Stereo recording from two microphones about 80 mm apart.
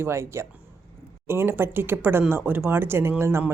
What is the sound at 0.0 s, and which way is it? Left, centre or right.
Speech, right.